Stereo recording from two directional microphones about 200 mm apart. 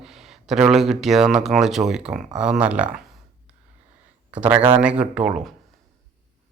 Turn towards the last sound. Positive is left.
turn(degrees=-5)  # may be behind; listen again after turning